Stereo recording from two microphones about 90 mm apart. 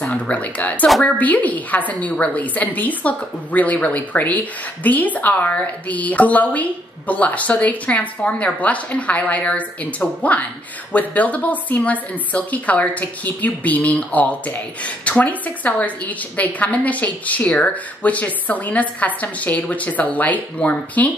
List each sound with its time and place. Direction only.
0.0 s speech: 15° left (ahead or behind)